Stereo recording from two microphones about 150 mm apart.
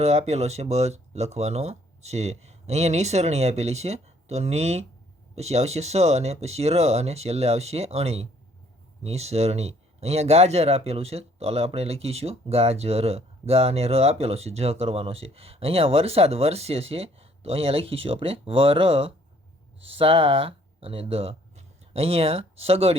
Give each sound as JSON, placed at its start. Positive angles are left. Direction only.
{"t": 0.0, "sound": "speech", "side_deg": -45}